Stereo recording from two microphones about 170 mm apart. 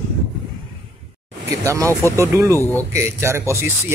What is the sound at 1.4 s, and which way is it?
Speech, 20° right (ahead or behind).